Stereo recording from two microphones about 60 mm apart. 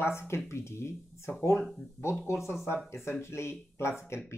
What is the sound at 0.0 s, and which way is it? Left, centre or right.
Speech, left.